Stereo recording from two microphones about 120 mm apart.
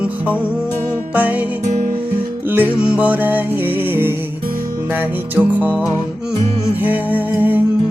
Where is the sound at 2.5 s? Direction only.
15° right (ahead or behind).